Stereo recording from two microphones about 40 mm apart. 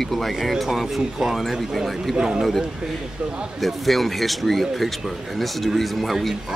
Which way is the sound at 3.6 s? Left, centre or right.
Centre.